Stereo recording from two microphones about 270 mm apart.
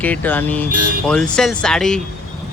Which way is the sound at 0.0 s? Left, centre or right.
Centre.